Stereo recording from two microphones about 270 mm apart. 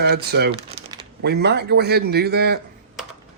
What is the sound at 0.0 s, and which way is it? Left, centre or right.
Speech, right.